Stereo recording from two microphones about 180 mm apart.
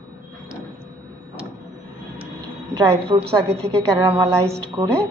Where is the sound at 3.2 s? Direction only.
5° left (ahead or behind).